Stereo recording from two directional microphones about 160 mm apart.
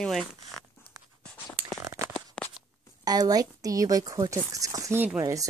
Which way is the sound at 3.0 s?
25° right (ahead or behind).